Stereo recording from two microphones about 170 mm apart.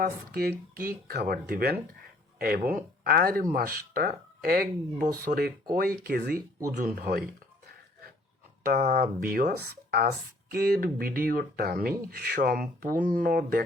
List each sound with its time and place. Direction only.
0.0 s speech: 65° right (ahead or behind)
3.0 s speech: 65° right (ahead or behind)
6.7 s speech: 50° right (ahead or behind)
8.6 s speech: 65° right (ahead or behind)